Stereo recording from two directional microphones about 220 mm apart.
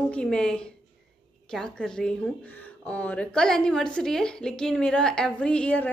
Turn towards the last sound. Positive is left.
turn(degrees=5)  # may be behind; listen again after turning